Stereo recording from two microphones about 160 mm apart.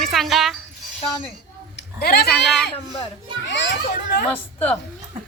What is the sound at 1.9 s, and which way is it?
Speech, 85° left.